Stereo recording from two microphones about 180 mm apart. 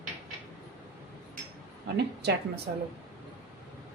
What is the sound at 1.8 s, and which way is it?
Speech, 65° right (ahead or behind).